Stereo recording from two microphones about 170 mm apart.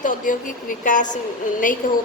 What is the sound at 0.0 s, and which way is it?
A woman's voice, 50° left (ahead or behind).